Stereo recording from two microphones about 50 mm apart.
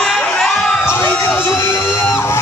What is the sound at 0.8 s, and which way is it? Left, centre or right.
Crowd, left.